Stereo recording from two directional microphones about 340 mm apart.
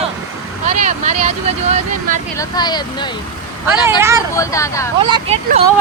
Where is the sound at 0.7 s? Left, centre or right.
Right.